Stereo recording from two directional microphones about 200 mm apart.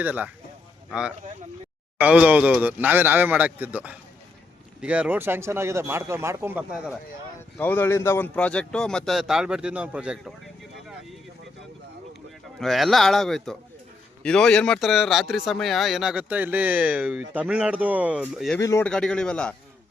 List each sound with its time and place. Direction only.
0.0 s speech: 10° right (ahead or behind)
7.6 s a man's voice: 10° left (ahead or behind)
12.5 s a man's voice: centre (ahead or behind)
18.6 s speech: 15° left (ahead or behind)
18.9 s a man's voice: 5° left (ahead or behind)